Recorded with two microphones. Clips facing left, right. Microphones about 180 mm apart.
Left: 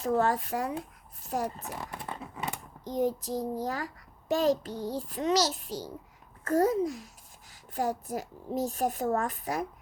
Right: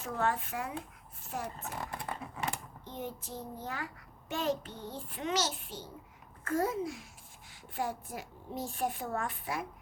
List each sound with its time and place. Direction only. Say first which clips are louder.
0.0 s a child's voice: left 7 dB; 35° left (ahead or behind)
2.8 s a child's voice: left 13 dB; 40° left (ahead or behind)